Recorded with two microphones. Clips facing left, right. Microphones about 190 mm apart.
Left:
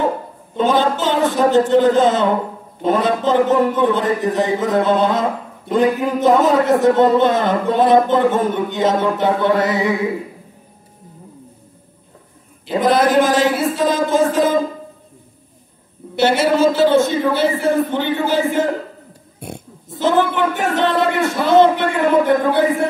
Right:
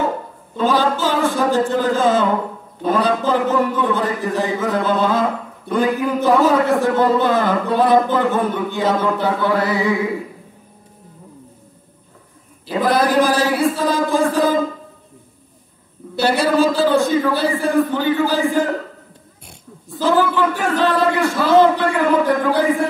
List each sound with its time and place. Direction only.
0.6 s a man's voice: 20° left (ahead or behind)
12.6 s a man's voice: 20° left (ahead or behind)
16.2 s a man's voice: 25° left (ahead or behind)
19.9 s a man's voice: 20° left (ahead or behind)